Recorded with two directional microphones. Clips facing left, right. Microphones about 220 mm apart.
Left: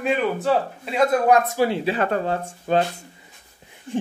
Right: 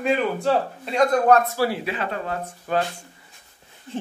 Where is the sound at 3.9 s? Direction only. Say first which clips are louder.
Left 5 dB; 15° left (ahead or behind).